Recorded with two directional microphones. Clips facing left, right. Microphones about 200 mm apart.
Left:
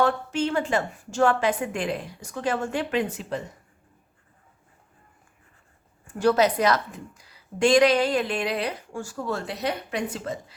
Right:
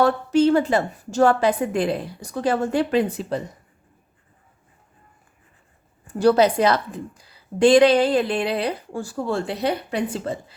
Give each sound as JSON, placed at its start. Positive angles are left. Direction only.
{"t": 0.0, "sound": "a woman's voice", "side_deg": -40}
{"t": 6.1, "sound": "a woman's voice", "side_deg": -35}